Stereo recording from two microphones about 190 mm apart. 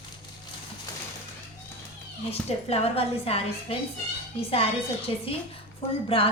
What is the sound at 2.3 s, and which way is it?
A woman's voice, 30° left (ahead or behind).